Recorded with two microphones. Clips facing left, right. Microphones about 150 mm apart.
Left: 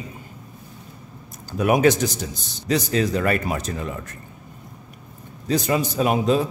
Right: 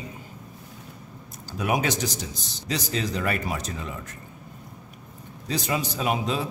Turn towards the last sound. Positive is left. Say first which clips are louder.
# left 7 dB
turn(degrees=45)  # may be behind; listen again after turning